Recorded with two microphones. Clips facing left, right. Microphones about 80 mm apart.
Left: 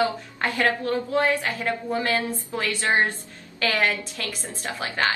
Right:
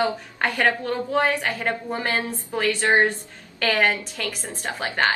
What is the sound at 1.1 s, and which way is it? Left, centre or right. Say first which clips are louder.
A woman's voice: right 2 dB; right.